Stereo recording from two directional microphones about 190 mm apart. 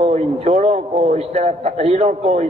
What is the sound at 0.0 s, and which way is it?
A man's voice, 35° right (ahead or behind).